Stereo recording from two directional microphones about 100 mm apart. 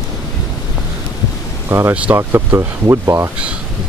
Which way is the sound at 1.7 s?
25° right (ahead or behind).